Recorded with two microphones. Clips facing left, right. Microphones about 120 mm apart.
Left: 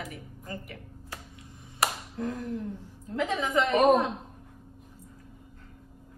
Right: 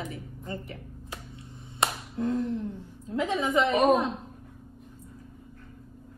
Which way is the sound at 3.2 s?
15° right (ahead or behind).